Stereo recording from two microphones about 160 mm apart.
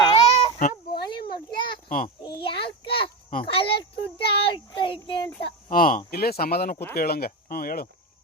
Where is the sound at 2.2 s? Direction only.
30° left (ahead or behind).